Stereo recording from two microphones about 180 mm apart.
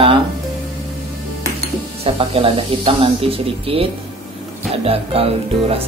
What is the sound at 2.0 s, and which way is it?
Speech, 30° right (ahead or behind).